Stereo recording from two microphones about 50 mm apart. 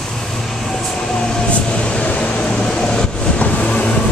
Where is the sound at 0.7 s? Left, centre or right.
Centre.